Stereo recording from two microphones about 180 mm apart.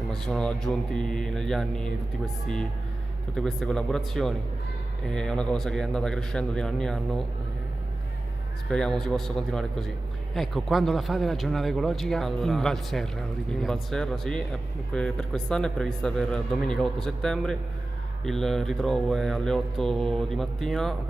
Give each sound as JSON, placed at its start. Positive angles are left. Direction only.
{"t": 0.1, "sound": "speech", "side_deg": 5}
{"t": 8.6, "sound": "speech", "side_deg": 5}